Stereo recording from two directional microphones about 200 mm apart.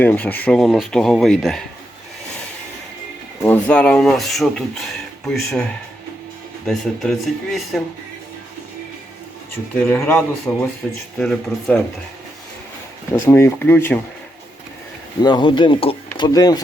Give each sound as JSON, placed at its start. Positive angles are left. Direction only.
{"t": 0.0, "sound": "speech", "side_deg": 10}
{"t": 3.4, "sound": "speech", "side_deg": 10}
{"t": 6.7, "sound": "speech", "side_deg": 0}
{"t": 9.9, "sound": "speech", "side_deg": 10}
{"t": 13.2, "sound": "speech", "side_deg": 10}
{"t": 15.2, "sound": "speech", "side_deg": 20}